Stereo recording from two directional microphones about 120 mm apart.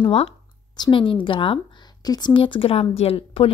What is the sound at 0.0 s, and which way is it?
Speech, 50° left (ahead or behind).